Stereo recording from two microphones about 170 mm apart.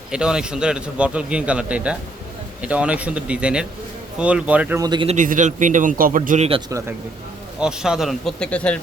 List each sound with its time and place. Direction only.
0.1 s a man's voice: 5° right (ahead or behind)
4.8 s speech: 25° right (ahead or behind)
5.0 s a man's voice: 50° right (ahead or behind)
6.7 s a man's voice: 20° right (ahead or behind)
7.6 s a man's voice: 5° right (ahead or behind)